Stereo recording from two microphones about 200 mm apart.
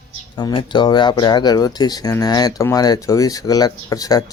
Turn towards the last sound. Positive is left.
turn(degrees=20)  # may be behind; listen again after turning